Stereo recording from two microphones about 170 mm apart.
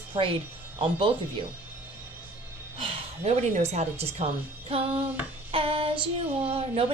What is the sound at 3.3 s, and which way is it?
Speech, 40° right (ahead or behind).